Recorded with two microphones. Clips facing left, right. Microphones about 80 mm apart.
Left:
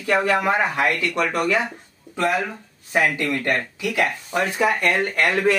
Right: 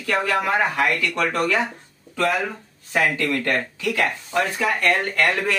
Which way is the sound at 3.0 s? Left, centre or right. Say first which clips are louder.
Even; centre.